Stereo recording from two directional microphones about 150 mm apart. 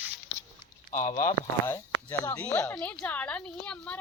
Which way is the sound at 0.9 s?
60° left (ahead or behind).